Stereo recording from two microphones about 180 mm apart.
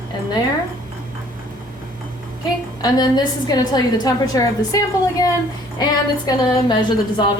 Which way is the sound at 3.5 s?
20° left (ahead or behind).